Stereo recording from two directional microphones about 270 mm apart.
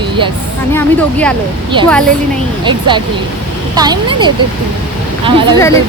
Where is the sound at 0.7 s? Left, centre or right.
Centre.